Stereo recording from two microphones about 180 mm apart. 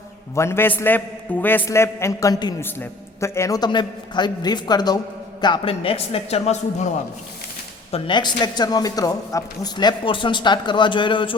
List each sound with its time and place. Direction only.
0.3 s a man's voice: 15° left (ahead or behind)